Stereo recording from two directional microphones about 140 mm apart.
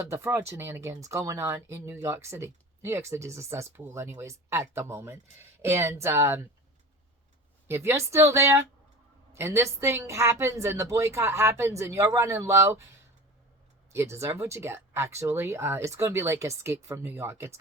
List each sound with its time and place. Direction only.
0.0 s speech: 20° right (ahead or behind)
7.7 s speech: 20° right (ahead or behind)
13.9 s speech: 20° right (ahead or behind)